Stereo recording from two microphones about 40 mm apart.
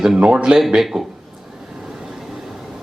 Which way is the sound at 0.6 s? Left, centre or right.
Centre.